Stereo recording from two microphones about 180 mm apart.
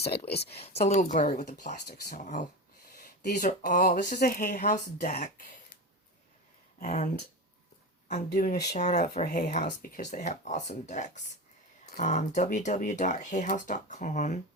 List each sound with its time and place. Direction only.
0.3 s speech: 65° left (ahead or behind)
0.6 s speech: 35° left (ahead or behind)
6.7 s speech: 45° left (ahead or behind)
8.7 s speech: 40° left (ahead or behind)